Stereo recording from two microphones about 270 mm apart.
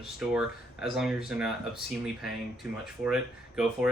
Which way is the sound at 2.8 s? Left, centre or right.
Centre.